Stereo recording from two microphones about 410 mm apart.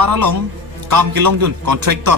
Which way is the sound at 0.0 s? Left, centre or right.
Right.